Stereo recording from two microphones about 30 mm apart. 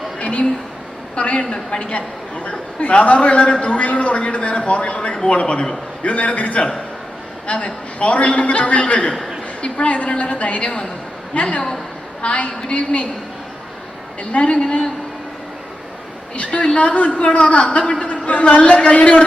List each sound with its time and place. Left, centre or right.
0.2 s a sound: left
1.1 s a man's voice: left
14.3 s a man's voice: left
16.5 s a man's voice: left
18.0 s a man's voice: left